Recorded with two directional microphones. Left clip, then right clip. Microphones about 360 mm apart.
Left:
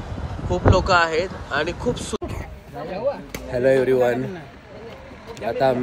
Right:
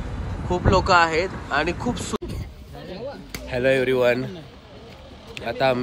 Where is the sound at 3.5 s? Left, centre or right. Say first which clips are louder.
Left 2 dB; centre.